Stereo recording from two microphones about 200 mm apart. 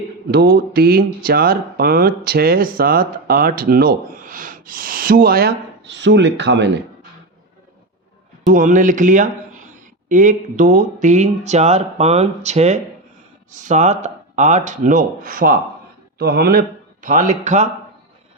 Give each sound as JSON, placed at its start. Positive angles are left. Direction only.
{"t": 0.3, "sound": "speech", "side_deg": -50}
{"t": 8.4, "sound": "a man's voice", "side_deg": -40}